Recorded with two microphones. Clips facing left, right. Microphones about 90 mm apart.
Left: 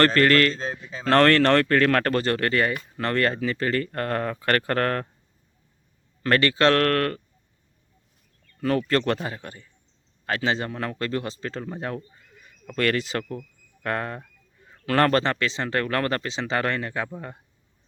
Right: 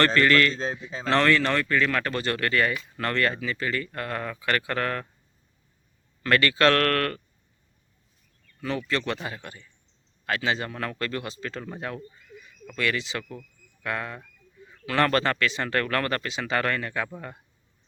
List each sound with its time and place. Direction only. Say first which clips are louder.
0.0 s speech: left 2 dB; 45° left (ahead or behind)
0.9 s speech: left 2 dB; 30° right (ahead or behind)
1.1 s speech: left 5 dB; 55° left (ahead or behind)
2.2 s speech: left 2 dB; 35° left (ahead or behind)
6.2 s speech: left 1 dB; 30° left (ahead or behind)
8.9 s speech: left 5 dB; 45° left (ahead or behind); by 11.9 s 30° left (ahead or behind)
12.7 s speech: left 4 dB; 50° left (ahead or behind)
14.7 s a sound: left 3 dB; 40° left (ahead or behind)
15.1 s speech: left 1 dB; 25° left (ahead or behind)